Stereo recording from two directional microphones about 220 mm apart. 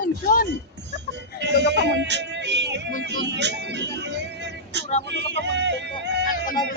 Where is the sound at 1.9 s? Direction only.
50° right (ahead or behind).